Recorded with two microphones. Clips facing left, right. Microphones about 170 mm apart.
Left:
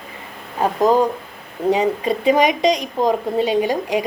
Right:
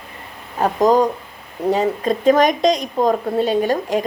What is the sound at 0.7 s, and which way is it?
Speech, 15° right (ahead or behind).